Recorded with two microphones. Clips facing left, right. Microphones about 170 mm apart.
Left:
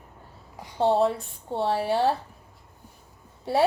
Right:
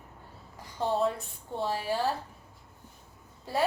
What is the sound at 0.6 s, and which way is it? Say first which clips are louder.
Speech: left 7 dB; 70° left (ahead or behind).